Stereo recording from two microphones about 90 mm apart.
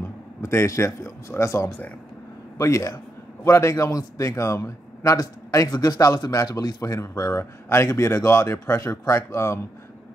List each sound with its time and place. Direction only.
0.4 s a man's voice: 35° left (ahead or behind)